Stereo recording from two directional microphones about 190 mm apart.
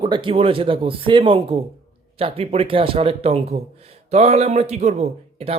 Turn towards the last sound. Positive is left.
turn(degrees=-35)  # may be behind; listen again after turning